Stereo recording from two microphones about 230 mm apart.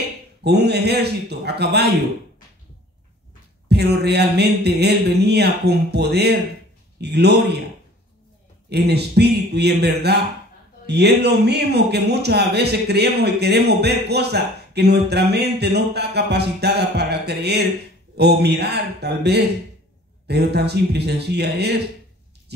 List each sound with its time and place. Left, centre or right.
0.4 s speech: right
3.6 s speech: right
8.6 s speech: right